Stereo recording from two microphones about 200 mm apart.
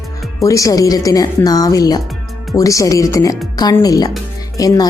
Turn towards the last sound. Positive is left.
turn(degrees=15)  # may be behind; listen again after turning